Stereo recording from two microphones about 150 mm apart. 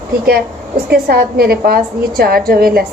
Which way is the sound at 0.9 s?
85° right.